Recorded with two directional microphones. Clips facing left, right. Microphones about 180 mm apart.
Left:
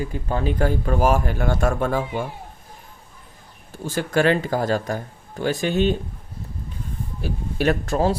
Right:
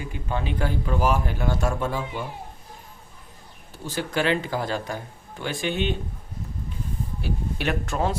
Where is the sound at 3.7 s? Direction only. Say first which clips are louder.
Left 5 dB; 50° left (ahead or behind).